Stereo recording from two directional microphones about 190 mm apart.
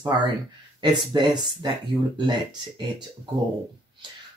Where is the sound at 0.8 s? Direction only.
25° right (ahead or behind).